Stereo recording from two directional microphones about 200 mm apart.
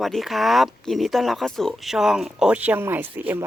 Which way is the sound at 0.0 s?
Centre (ahead or behind).